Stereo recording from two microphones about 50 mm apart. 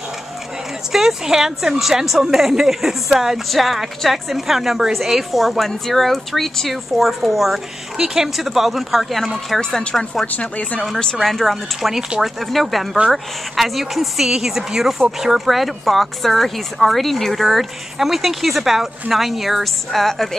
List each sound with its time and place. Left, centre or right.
0.9 s speech: centre
9.6 s speech: centre
10.2 s speech: left
11.2 s speech: centre